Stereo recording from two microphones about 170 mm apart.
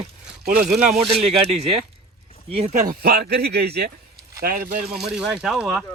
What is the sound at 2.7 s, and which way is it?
Speech, 60° right (ahead or behind).